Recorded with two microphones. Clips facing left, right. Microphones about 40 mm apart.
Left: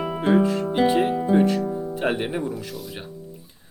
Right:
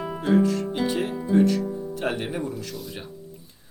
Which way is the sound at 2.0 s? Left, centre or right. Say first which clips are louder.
Left 3 dB; left.